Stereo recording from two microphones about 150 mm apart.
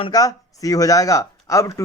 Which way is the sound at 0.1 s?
25° left (ahead or behind).